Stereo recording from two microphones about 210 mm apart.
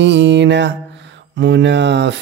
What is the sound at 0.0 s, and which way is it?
Speech, 60° right (ahead or behind).